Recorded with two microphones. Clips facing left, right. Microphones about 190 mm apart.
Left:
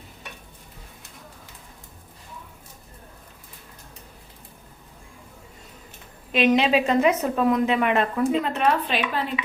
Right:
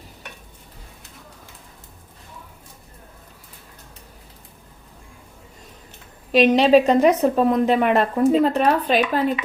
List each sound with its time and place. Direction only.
6.3 s a woman's voice: 35° right (ahead or behind)